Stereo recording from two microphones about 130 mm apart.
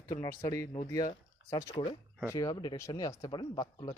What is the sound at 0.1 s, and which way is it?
Speech, 30° left (ahead or behind).